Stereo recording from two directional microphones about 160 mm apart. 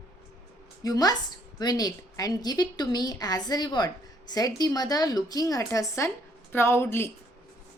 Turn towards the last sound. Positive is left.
turn(degrees=15)  # may be behind; listen again after turning